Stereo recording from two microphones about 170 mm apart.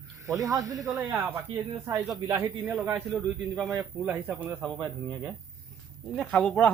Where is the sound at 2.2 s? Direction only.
20° right (ahead or behind).